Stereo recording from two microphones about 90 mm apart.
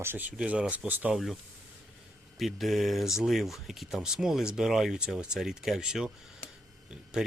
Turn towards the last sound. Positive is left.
turn(degrees=-10)  # may be behind; listen again after turning